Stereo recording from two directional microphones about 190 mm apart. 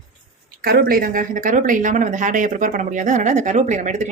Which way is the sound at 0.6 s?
50° right (ahead or behind).